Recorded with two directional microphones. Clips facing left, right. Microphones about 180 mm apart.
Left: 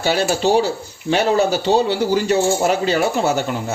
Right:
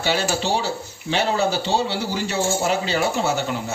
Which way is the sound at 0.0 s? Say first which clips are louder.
Left 5 dB; 45° left (ahead or behind).